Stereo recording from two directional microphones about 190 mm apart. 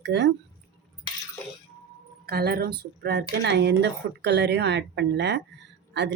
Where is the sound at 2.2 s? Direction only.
55° right (ahead or behind).